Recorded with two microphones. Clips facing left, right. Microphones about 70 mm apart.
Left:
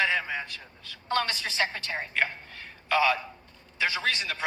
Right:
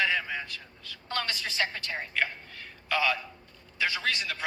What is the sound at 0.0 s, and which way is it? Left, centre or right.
A man's voice, left.